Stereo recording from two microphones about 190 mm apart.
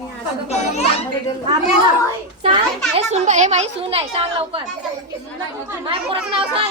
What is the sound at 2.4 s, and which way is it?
A child's voice, 30° right (ahead or behind).